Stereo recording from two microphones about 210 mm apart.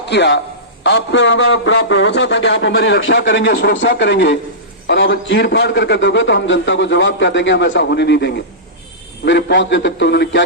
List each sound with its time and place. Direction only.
0.0 s a man's voice: 55° left (ahead or behind)